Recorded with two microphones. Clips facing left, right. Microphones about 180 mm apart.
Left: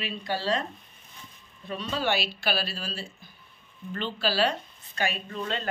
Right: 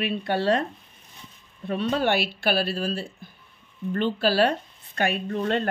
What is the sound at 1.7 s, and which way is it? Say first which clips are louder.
A woman's voice: right 5 dB; 55° right (ahead or behind).